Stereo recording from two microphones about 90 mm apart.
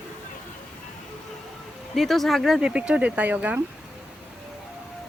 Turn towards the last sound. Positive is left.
turn(degrees=-15)  # may be behind; listen again after turning